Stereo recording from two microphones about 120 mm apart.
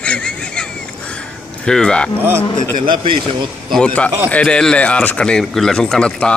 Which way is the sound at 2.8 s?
45° right (ahead or behind).